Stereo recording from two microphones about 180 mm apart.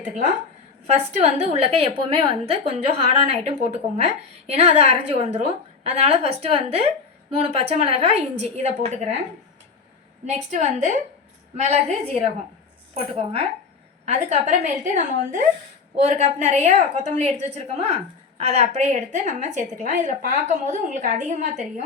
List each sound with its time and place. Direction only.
0.9 s a woman's voice: 40° right (ahead or behind)
10.2 s a woman's voice: 40° right (ahead or behind)